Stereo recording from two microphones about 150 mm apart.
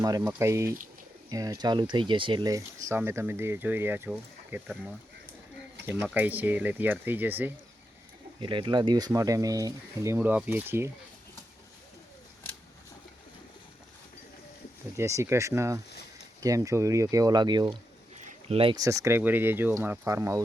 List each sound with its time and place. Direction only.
0.0 s speech: 25° right (ahead or behind)
5.9 s speech: 10° right (ahead or behind)
8.4 s speech: 35° right (ahead or behind); by 10.9 s 15° right (ahead or behind)
14.9 s speech: 20° right (ahead or behind)
18.3 s a sound: 40° right (ahead or behind)
18.8 s speech: 20° right (ahead or behind)